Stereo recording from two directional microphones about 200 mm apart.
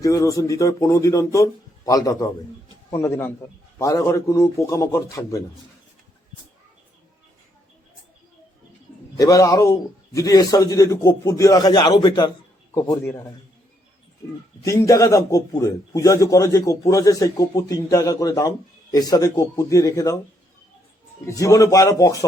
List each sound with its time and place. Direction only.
0.0 s a man's voice: 15° left (ahead or behind)
9.1 s a man's voice: 15° left (ahead or behind)
14.6 s a man's voice: 15° left (ahead or behind)
21.2 s a man's voice: 15° left (ahead or behind)